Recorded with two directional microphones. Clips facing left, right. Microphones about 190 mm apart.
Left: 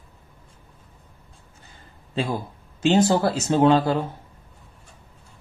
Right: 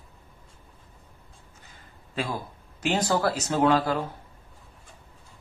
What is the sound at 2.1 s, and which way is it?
Speech, 25° left (ahead or behind).